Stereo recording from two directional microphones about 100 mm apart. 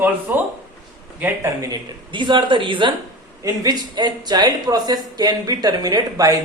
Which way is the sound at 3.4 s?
40° right (ahead or behind).